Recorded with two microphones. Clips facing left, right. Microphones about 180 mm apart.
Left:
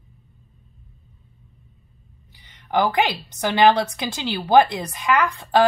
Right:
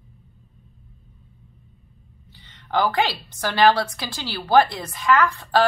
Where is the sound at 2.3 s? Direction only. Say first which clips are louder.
Left 2 dB; 15° left (ahead or behind).